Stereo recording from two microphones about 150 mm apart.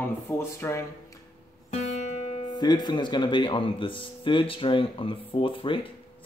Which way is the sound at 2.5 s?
30° left (ahead or behind).